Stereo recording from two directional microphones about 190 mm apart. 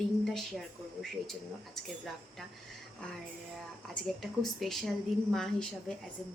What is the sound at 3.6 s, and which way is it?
Speech, centre (ahead or behind).